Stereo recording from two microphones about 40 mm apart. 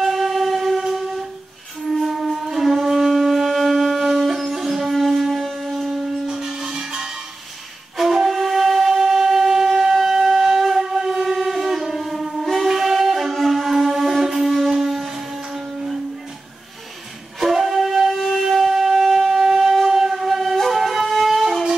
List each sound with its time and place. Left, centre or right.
0.0 s music: centre
1.9 s wind instrument: centre
6.2 s music: centre
8.0 s wind instrument: centre
12.6 s shofar: centre
17.4 s wind instrument: centre